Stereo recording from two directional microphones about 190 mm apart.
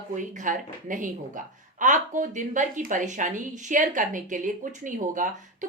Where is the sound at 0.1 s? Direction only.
40° right (ahead or behind).